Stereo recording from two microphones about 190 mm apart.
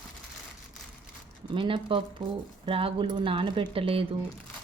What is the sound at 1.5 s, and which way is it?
Speech, 25° right (ahead or behind).